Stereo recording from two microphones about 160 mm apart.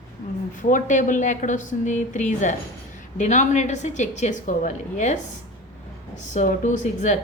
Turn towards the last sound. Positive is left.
turn(degrees=50)  # may be behind; listen again after turning